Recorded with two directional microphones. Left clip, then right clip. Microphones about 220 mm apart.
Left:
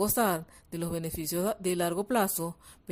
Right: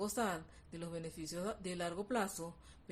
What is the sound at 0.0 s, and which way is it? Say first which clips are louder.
A woman's voice: left 11 dB; 45° left (ahead or behind).